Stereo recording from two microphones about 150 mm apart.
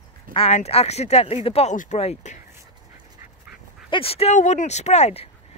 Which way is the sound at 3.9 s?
40° left (ahead or behind).